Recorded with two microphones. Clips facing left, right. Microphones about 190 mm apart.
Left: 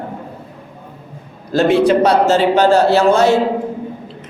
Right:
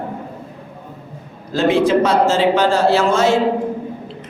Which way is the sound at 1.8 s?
65° left (ahead or behind).